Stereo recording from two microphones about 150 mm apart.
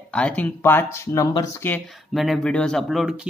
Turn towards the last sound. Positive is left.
turn(degrees=-5)  # may be behind; listen again after turning